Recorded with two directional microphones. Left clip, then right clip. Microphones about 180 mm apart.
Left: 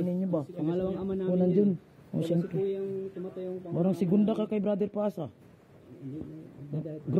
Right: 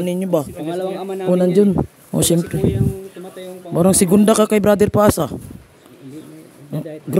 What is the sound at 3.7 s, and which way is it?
Speech, 65° right (ahead or behind).